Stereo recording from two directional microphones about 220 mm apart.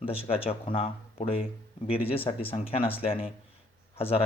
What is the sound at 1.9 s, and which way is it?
Speech, 25° left (ahead or behind).